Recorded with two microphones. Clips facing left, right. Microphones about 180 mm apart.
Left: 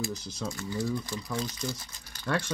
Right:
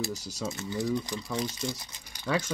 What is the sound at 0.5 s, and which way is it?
Speech, 20° right (ahead or behind).